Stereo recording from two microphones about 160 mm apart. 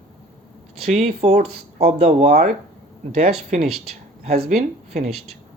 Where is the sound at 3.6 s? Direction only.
Centre (ahead or behind).